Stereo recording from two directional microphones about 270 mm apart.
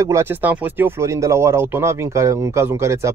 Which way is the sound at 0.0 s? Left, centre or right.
Centre.